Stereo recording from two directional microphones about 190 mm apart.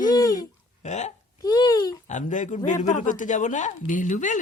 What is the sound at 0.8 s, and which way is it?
Speech, 35° left (ahead or behind).